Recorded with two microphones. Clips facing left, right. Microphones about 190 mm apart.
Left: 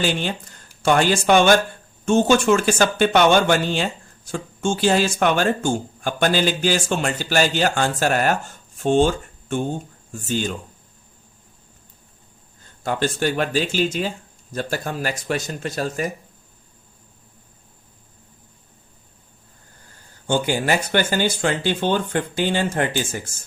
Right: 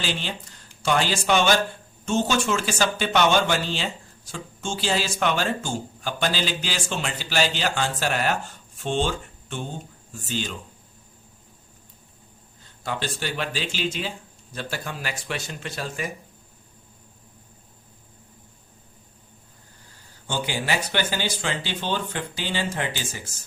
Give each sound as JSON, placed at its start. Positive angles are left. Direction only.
{"t": 0.0, "sound": "speech", "side_deg": 50}
{"t": 12.8, "sound": "speech", "side_deg": 50}
{"t": 20.2, "sound": "speech", "side_deg": 50}